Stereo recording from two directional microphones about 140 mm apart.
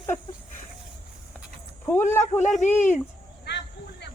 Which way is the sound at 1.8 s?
15° left (ahead or behind).